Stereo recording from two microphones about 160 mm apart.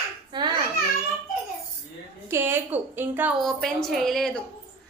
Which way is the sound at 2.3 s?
15° right (ahead or behind).